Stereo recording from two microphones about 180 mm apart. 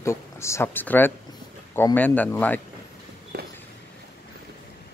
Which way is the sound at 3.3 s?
60° right (ahead or behind).